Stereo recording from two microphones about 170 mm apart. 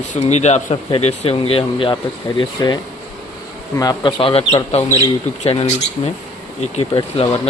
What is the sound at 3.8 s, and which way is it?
Speech, 25° left (ahead or behind).